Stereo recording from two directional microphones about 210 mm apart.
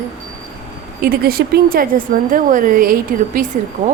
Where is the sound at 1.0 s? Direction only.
45° right (ahead or behind).